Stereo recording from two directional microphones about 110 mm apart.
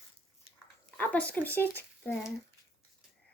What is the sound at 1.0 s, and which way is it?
Speech, 15° left (ahead or behind).